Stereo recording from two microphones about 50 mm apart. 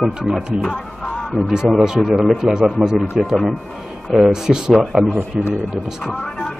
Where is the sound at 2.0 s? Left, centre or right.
Centre.